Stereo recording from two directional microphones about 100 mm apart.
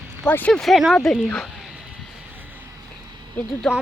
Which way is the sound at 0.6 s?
Centre (ahead or behind).